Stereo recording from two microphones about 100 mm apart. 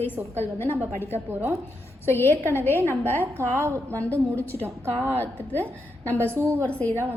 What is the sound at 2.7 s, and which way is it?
A woman's voice, 25° right (ahead or behind).